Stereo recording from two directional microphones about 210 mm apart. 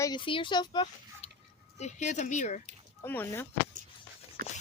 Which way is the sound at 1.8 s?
35° left (ahead or behind).